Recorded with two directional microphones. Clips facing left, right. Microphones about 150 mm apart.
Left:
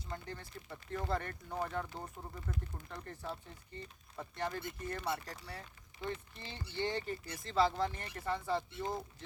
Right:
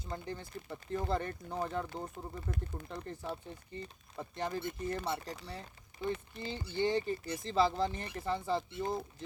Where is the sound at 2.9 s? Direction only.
25° right (ahead or behind).